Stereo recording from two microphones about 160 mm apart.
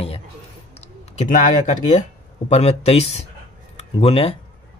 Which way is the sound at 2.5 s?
40° left (ahead or behind).